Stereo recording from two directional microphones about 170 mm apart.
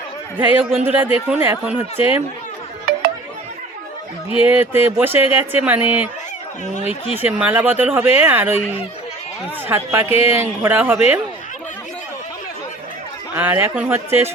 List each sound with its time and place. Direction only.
0.3 s speech: 10° right (ahead or behind)
2.9 s music: 65° right (ahead or behind)
4.4 s speech: 10° right (ahead or behind)
6.7 s speech: 40° left (ahead or behind)
7.3 s speech: 10° right (ahead or behind)
9.6 s speech: 15° right (ahead or behind)
13.3 s speech: 10° right (ahead or behind)